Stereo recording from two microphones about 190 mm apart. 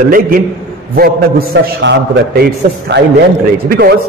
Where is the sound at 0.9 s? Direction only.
55° right (ahead or behind).